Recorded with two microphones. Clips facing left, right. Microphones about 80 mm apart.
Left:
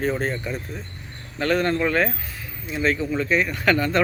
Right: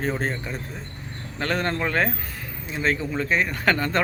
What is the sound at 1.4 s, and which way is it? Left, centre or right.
Speech, right.